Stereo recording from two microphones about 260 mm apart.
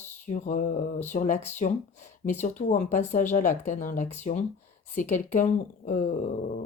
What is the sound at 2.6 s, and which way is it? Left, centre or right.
Speech, left.